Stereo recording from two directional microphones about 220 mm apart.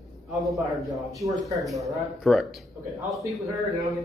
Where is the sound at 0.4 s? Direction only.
Centre (ahead or behind).